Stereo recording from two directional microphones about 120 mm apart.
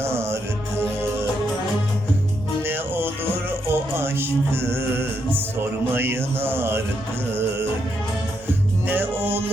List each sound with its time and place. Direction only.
0.0 s music: 20° right (ahead or behind)
2.6 s music: 20° right (ahead or behind)
5.9 s mantra: 20° right (ahead or behind)
8.9 s music: 15° right (ahead or behind)